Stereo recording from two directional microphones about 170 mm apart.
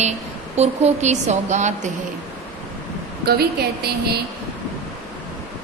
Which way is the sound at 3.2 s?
65° right (ahead or behind).